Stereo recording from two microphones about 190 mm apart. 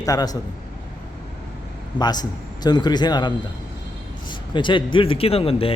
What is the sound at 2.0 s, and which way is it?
Speech, 20° left (ahead or behind).